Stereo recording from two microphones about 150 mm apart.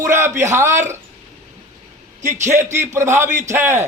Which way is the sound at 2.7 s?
20° right (ahead or behind).